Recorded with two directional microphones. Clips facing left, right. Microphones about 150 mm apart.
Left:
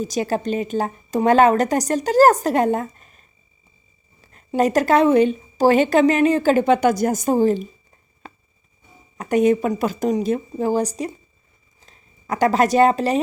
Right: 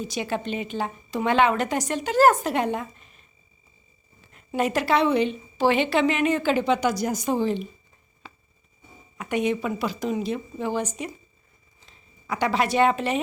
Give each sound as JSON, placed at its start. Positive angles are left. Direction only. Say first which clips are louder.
{"t": 0.0, "sound": "a woman's voice", "louder": "left 6 dB", "side_deg": 40}
{"t": 9.1, "sound": "a woman's voice", "louder": "left 8 dB", "side_deg": 45}